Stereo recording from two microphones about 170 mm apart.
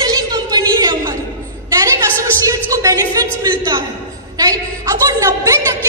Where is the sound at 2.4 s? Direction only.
20° right (ahead or behind).